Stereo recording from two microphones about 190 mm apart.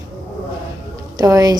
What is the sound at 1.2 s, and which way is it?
Speech, 20° right (ahead or behind).